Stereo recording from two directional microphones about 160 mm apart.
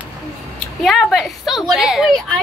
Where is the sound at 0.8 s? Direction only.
Centre (ahead or behind).